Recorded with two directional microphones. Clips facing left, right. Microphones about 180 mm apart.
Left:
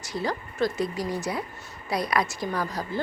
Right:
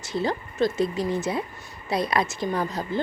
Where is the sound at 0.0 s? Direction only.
25° right (ahead or behind).